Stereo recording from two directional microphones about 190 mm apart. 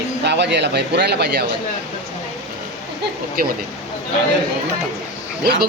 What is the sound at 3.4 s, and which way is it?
Speech, 50° right (ahead or behind).